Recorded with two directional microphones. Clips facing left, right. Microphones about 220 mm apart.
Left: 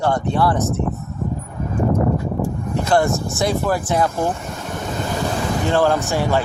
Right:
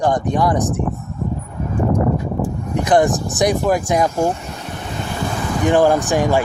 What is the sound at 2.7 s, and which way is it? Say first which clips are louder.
Speech: right 3 dB; 15° right (ahead or behind).